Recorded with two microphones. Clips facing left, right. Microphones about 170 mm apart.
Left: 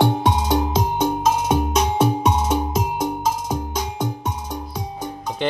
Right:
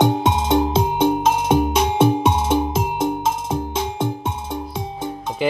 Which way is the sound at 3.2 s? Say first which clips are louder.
Right 1 dB; 25° right (ahead or behind).